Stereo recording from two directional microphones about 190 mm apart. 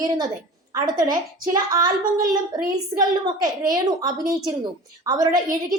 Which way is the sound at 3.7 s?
20° right (ahead or behind).